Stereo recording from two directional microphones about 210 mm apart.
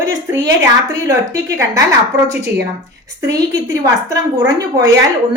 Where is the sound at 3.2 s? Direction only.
15° right (ahead or behind).